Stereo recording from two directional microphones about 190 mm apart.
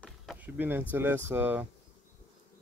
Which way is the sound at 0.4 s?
10° right (ahead or behind).